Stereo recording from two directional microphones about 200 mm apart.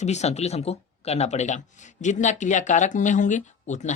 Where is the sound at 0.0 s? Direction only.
35° left (ahead or behind).